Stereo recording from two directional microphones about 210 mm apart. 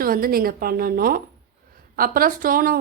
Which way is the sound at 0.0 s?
45° right (ahead or behind).